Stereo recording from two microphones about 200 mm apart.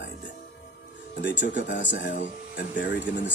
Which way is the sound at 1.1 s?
60° left (ahead or behind).